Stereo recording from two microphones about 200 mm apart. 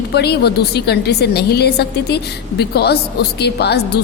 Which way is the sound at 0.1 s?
55° left (ahead or behind).